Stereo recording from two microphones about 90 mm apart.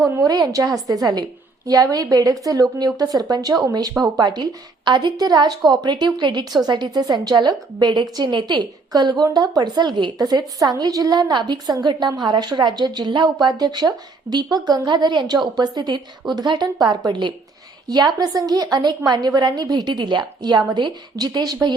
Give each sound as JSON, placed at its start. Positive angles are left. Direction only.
{"t": 0.0, "sound": "a woman's voice", "side_deg": -35}